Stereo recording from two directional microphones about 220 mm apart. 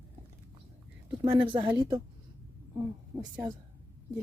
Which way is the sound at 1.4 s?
20° right (ahead or behind).